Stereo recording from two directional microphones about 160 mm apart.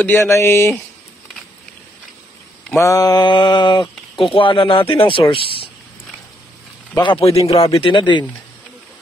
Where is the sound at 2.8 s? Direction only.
20° left (ahead or behind).